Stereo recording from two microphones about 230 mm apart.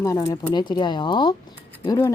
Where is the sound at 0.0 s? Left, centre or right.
Centre.